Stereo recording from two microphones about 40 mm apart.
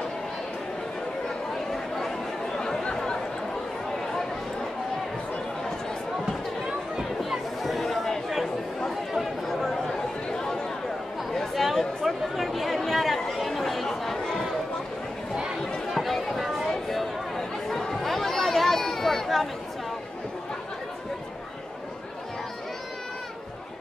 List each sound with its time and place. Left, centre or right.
1.7 s chatter: centre
7.2 s chatter: centre
10.3 s a sound: centre
11.5 s chatter: centre
15.6 s chatter: centre
16.0 s a sound: centre
17.4 s chatter: centre